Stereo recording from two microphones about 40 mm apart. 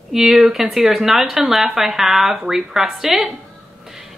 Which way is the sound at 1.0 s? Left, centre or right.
Centre.